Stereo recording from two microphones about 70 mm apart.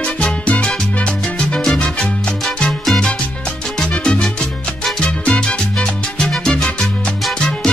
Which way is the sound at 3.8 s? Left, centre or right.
Centre.